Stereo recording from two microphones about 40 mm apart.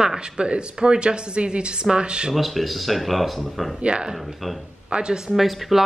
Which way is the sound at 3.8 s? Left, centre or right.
Right.